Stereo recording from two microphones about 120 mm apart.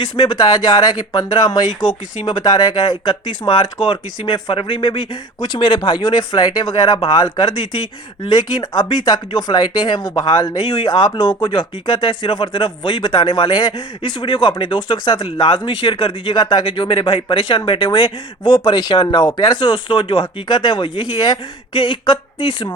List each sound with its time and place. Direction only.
0.0 s speech: 40° left (ahead or behind)